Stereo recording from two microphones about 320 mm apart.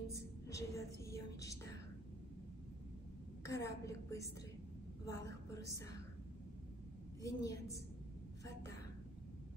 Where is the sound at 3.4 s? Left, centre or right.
Centre.